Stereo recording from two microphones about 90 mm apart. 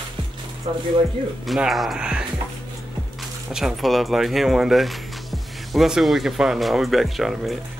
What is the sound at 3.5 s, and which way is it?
Speech, centre (ahead or behind).